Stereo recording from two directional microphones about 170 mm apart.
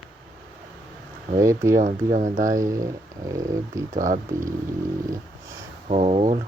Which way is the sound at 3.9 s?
50° right (ahead or behind).